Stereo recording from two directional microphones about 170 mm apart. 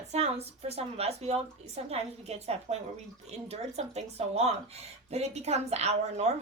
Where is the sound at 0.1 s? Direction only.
40° right (ahead or behind).